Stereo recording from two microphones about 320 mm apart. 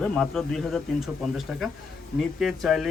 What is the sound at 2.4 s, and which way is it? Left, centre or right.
Speech, centre.